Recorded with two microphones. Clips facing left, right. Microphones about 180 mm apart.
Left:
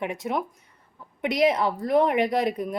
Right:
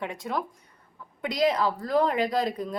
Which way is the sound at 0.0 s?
20° left (ahead or behind).